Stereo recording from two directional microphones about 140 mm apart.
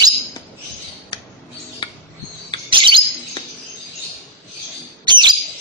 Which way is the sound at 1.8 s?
35° left (ahead or behind).